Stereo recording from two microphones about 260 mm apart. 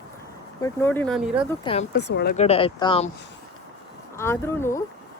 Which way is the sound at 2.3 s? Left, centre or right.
Left.